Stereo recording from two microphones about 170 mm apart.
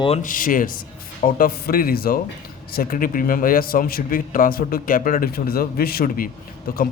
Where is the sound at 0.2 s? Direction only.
55° left (ahead or behind).